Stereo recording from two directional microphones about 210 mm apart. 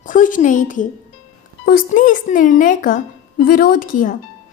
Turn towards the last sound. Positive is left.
turn(degrees=40)  # may be behind; listen again after turning